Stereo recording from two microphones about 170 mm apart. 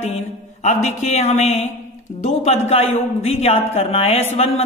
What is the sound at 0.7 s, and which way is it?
A woman's voice, 40° left (ahead or behind).